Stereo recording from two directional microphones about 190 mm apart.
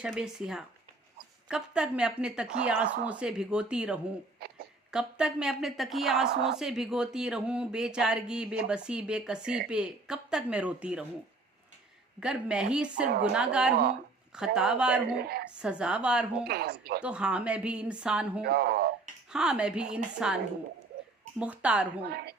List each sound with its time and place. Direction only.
0.0 s a woman's voice: 5° right (ahead or behind)
6.3 s speech: 60° right (ahead or behind)
6.6 s a woman's voice: centre (ahead or behind)
12.2 s a woman's voice: 5° right (ahead or behind)
15.1 s speech: 55° right (ahead or behind)
15.5 s a woman's voice: 5° right (ahead or behind)
16.5 s speech: 55° right (ahead or behind)
17.0 s a woman's voice: 5° right (ahead or behind)
18.4 s speech: 55° right (ahead or behind)
19.3 s a woman's voice: 5° right (ahead or behind)
22.0 s speech: 55° right (ahead or behind)